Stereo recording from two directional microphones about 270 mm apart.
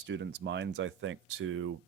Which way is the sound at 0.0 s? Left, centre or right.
Right.